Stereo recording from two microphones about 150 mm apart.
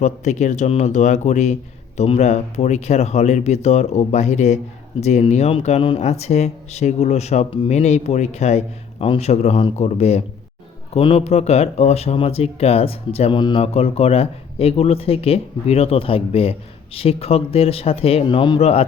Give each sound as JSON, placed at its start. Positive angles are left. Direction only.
{"t": 0.0, "sound": "speech", "side_deg": 50}